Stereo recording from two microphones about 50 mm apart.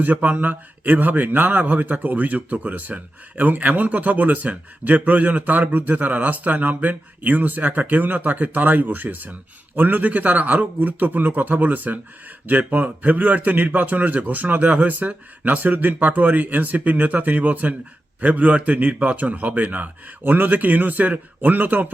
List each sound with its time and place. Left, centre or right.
0.0 s speech: right